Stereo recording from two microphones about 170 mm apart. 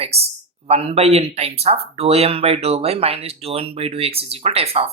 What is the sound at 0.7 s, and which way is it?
Speech, 35° right (ahead or behind).